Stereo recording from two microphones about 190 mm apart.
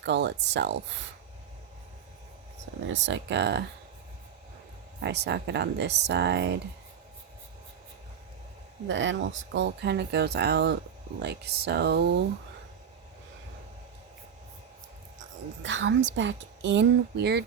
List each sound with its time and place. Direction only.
0.0 s speech: 65° right (ahead or behind)
2.9 s speech: 70° right (ahead or behind)
4.9 s speech: 60° right (ahead or behind)
8.9 s speech: 80° right
15.6 s a woman's voice: 80° right; by 17.4 s 60° right (ahead or behind)